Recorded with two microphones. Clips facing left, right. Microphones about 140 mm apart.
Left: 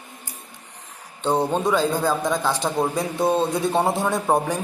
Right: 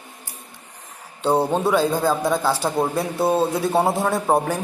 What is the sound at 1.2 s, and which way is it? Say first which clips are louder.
A man's voice: right 2 dB; 10° right (ahead or behind).